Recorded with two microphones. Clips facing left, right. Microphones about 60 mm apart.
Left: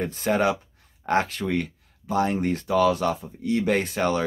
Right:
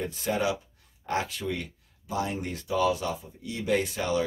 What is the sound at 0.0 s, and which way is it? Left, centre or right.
Speech, left.